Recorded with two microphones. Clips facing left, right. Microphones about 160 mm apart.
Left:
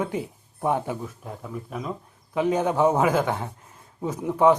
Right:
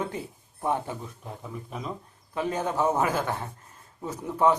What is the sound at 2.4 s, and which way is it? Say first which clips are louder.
A man's voice: left 6 dB; 15° left (ahead or behind).